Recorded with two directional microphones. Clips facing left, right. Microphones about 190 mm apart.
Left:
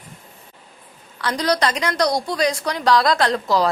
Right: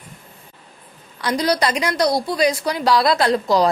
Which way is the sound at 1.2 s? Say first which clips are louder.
Right 1 dB; 10° right (ahead or behind).